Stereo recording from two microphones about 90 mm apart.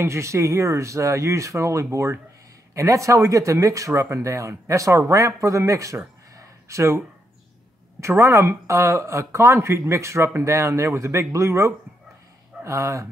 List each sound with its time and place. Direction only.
0.0 s speech: 35° right (ahead or behind)
6.3 s a sound: 35° right (ahead or behind)
8.0 s speech: 35° right (ahead or behind)